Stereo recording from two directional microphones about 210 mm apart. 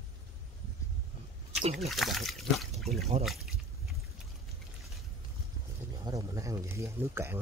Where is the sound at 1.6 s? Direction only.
30° right (ahead or behind).